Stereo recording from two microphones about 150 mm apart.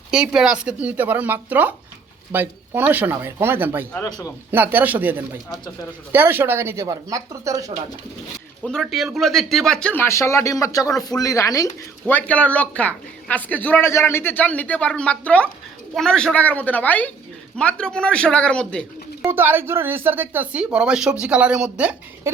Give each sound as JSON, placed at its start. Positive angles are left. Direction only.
{"t": 0.1, "sound": "speech", "side_deg": -5}
{"t": 3.9, "sound": "a man's voice", "side_deg": 20}
{"t": 4.5, "sound": "speech", "side_deg": -10}
{"t": 8.6, "sound": "speech", "side_deg": 0}
{"t": 19.2, "sound": "speech", "side_deg": -15}